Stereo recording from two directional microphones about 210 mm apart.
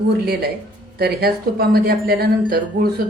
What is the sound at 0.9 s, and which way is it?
Speech, 50° right (ahead or behind).